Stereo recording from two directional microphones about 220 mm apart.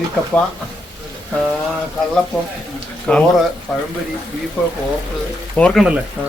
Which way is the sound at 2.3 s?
Centre (ahead or behind).